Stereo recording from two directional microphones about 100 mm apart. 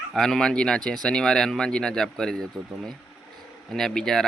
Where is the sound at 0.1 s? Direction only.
5° left (ahead or behind).